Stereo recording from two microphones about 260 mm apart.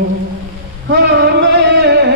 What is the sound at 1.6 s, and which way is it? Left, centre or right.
Music, right.